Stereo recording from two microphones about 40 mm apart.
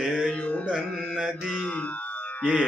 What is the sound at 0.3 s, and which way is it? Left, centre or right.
Music, left.